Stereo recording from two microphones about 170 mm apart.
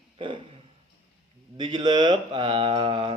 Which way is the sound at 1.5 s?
25° right (ahead or behind).